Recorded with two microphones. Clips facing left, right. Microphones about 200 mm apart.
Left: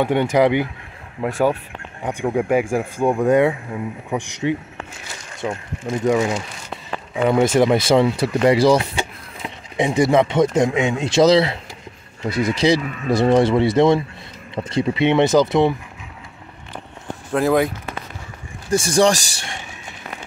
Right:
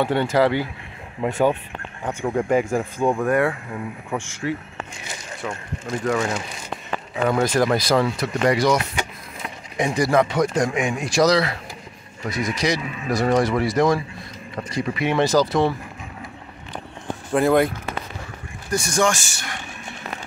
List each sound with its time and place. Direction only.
0.0 s speech: 15° left (ahead or behind)
1.2 s speech: 5° left (ahead or behind); by 15.7 s 20° left (ahead or behind)
17.3 s speech: centre (ahead or behind)
18.7 s speech: 30° left (ahead or behind)